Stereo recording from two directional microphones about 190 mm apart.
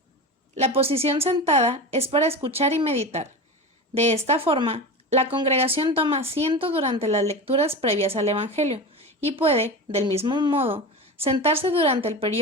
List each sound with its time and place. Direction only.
0.5 s speech: 30° right (ahead or behind)